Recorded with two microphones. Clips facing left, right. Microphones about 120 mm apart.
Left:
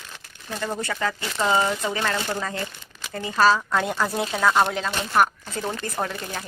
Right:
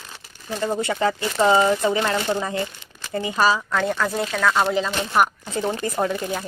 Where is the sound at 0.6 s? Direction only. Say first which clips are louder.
Right 5 dB; 20° right (ahead or behind).